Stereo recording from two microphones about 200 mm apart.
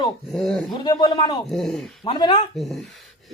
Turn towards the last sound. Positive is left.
turn(degrees=0)  # may be behind; listen again after turning